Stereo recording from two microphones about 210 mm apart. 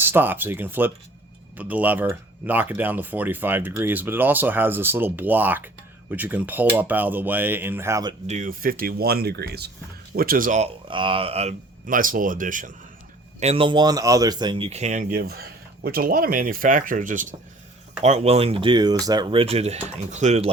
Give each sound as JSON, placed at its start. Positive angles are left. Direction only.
{"t": 0.0, "sound": "speech", "side_deg": -10}
{"t": 8.3, "sound": "speech", "side_deg": -40}
{"t": 10.8, "sound": "speech", "side_deg": -25}
{"t": 13.4, "sound": "speech", "side_deg": -25}